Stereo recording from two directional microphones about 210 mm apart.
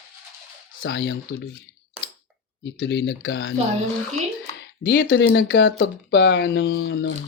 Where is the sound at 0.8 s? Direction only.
55° left (ahead or behind).